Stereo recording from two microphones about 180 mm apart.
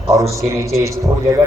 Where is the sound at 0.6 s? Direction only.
15° right (ahead or behind).